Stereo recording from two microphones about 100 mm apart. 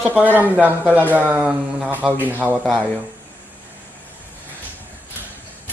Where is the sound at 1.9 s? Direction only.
20° right (ahead or behind).